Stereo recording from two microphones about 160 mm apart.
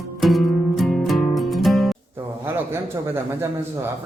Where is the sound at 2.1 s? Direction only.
15° right (ahead or behind).